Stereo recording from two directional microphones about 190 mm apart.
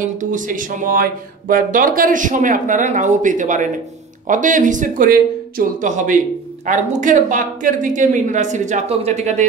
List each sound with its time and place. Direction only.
0.2 s a woman's voice: 45° right (ahead or behind)